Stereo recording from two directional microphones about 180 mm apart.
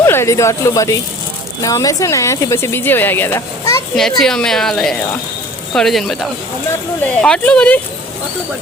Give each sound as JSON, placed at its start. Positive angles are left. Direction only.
{"t": 0.0, "sound": "speech", "side_deg": 15}
{"t": 3.9, "sound": "speech", "side_deg": 0}